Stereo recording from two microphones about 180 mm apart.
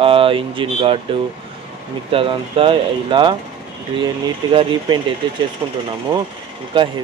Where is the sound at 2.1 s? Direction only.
30° right (ahead or behind).